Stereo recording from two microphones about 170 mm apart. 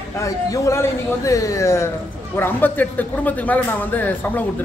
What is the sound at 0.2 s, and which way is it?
Speech, 15° left (ahead or behind).